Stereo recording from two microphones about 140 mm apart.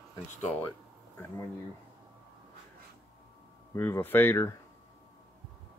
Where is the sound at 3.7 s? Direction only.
15° left (ahead or behind).